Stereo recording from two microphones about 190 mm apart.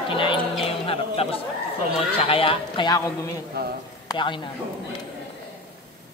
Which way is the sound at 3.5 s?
55° right (ahead or behind).